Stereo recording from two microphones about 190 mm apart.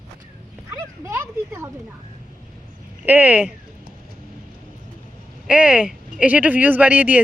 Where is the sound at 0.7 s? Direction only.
15° right (ahead or behind).